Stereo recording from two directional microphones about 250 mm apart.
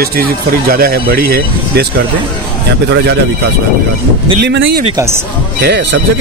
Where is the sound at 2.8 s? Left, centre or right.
Right.